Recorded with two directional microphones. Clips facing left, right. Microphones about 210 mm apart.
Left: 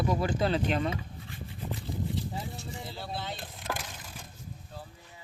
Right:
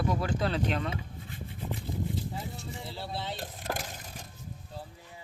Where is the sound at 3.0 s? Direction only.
30° right (ahead or behind).